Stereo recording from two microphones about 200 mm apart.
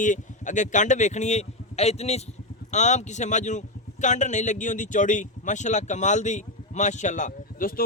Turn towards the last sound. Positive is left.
turn(degrees=45)  # may be behind; listen again after turning